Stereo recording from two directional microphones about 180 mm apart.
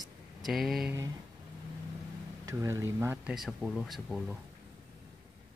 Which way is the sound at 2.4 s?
15° right (ahead or behind).